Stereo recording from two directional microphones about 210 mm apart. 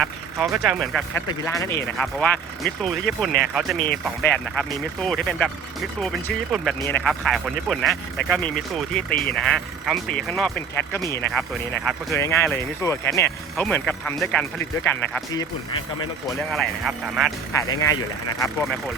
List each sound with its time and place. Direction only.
0.0 s speech: centre (ahead or behind)
1.1 s speech: 15° left (ahead or behind)
9.0 s speech: 45° left (ahead or behind)
9.3 s speech: centre (ahead or behind)
15.4 s speech: 20° left (ahead or behind)
16.5 s speech: centre (ahead or behind)
17.7 s speech: 15° left (ahead or behind)